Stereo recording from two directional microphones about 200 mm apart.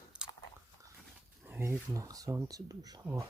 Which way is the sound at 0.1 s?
5° right (ahead or behind).